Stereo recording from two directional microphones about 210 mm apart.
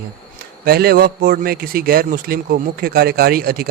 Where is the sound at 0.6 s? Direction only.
50° right (ahead or behind).